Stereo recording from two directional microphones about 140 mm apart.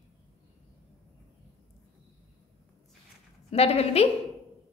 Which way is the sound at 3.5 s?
45° left (ahead or behind).